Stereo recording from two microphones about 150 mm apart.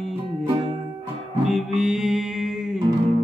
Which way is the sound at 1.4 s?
Centre (ahead or behind).